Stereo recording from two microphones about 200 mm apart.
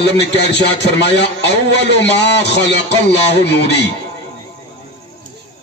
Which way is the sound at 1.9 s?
60° left (ahead or behind).